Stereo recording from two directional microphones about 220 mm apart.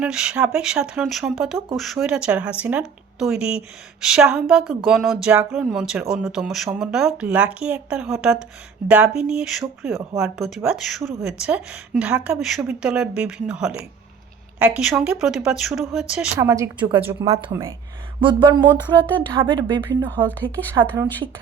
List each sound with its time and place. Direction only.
0.0 s a woman's voice: 5° right (ahead or behind); by 20.7 s 20° right (ahead or behind)